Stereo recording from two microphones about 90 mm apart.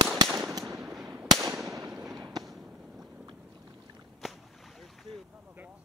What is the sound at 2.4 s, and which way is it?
Fireworks, 5° right (ahead or behind).